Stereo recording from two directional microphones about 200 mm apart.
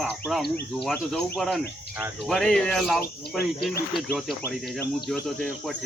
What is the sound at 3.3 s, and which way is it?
Speech, 50° left (ahead or behind).